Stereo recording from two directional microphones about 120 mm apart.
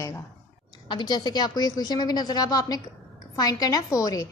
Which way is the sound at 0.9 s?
35° left (ahead or behind).